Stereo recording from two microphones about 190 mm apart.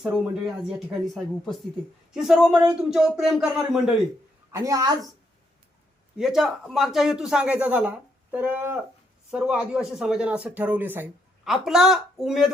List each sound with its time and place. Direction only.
0.0 s a man's voice: 5° right (ahead or behind)
4.5 s a woman's voice: 15° right (ahead or behind)
6.1 s a man's voice: centre (ahead or behind)